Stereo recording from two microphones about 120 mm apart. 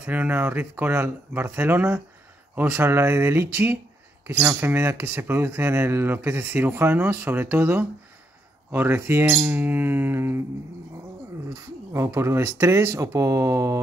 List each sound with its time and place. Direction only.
0.0 s speech: 15° right (ahead or behind)
11.5 s speech: 25° right (ahead or behind)